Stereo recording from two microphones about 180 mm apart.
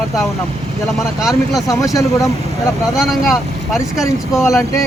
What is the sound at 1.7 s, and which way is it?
Speech, 20° left (ahead or behind).